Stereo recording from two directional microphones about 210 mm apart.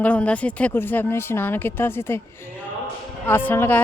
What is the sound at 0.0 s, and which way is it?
Speech, 5° left (ahead or behind).